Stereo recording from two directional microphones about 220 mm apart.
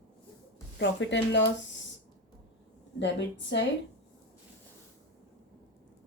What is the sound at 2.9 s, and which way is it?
Speech, 55° left (ahead or behind).